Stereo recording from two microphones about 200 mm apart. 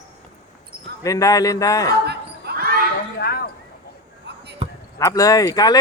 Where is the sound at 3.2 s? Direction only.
50° left (ahead or behind).